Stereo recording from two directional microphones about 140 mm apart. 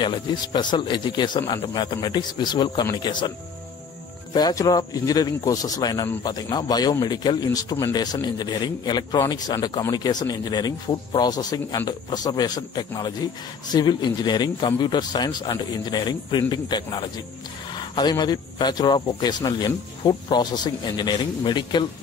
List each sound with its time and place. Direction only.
0.0 s a man's voice: 35° left (ahead or behind)